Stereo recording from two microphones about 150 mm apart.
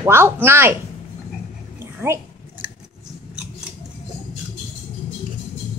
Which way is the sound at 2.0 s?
15° right (ahead or behind).